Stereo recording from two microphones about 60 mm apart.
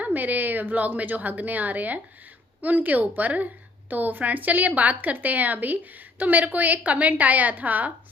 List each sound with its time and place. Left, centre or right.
0.0 s a woman's voice: right